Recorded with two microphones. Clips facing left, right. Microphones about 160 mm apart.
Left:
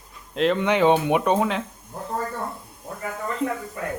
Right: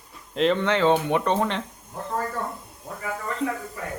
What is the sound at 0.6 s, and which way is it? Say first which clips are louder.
Speech: left 2 dB; 15° left (ahead or behind).